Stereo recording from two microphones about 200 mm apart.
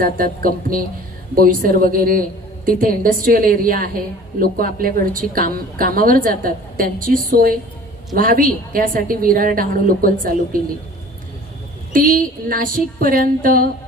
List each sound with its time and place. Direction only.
0.0 s a woman's voice: 45° right (ahead or behind)
11.9 s a woman's voice: 45° right (ahead or behind)